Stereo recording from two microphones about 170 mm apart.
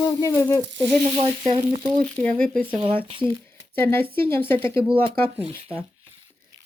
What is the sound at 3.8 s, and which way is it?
Speech, 10° left (ahead or behind).